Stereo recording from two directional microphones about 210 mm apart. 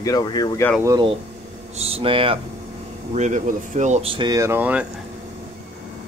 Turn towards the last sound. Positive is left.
turn(degrees=-10)  # may be behind; listen again after turning